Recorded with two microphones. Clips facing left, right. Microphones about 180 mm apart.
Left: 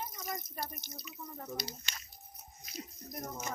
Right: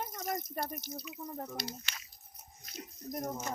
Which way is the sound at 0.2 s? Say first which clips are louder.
Right 7 dB; 50° right (ahead or behind).